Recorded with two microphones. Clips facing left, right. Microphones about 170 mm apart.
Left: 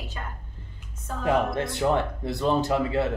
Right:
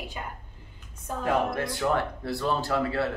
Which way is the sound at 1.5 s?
20° left (ahead or behind).